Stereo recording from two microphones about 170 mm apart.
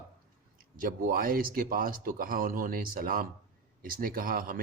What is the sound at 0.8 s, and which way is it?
A man's voice, 55° right (ahead or behind).